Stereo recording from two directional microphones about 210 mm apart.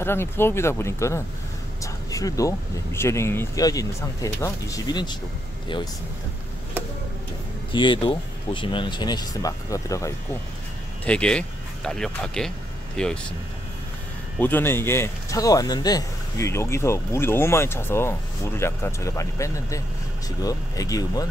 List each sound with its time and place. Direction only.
0.0 s speech: 10° left (ahead or behind)
7.7 s speech: 25° left (ahead or behind); by 13.2 s 5° left (ahead or behind)
14.4 s speech: 10° left (ahead or behind)